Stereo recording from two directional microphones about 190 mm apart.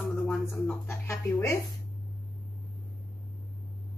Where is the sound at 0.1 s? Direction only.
Centre (ahead or behind).